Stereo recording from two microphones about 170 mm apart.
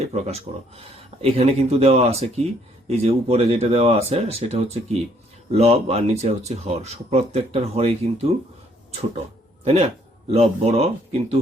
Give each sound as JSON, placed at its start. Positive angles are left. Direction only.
{"t": 0.0, "sound": "speech", "side_deg": -40}
{"t": 9.6, "sound": "a man's voice", "side_deg": -35}